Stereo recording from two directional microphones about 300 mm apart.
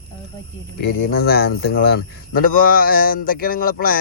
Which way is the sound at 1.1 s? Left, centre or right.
Left.